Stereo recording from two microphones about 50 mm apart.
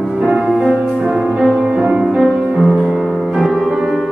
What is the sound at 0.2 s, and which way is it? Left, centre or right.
Music, centre.